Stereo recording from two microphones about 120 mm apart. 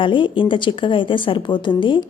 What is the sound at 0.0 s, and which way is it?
A woman's voice, 45° left (ahead or behind).